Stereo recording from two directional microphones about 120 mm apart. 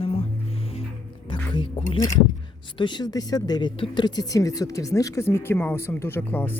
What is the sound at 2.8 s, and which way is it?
Speech, 40° left (ahead or behind).